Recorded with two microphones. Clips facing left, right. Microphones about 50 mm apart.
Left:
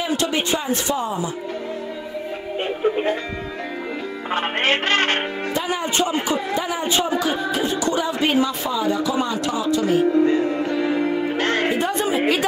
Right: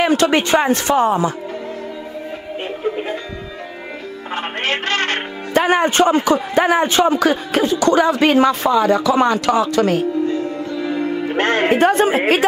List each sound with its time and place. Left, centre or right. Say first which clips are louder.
0.0 s a man's voice: right 7 dB; right
4.3 s a man's voice: left 1 dB; left
5.5 s a man's voice: right 11 dB; right
10.5 s music: left 2 dB; left
10.8 s music: right 2 dB; centre
11.3 s music: right 5 dB; right
11.8 s a woman's voice: right 6 dB; right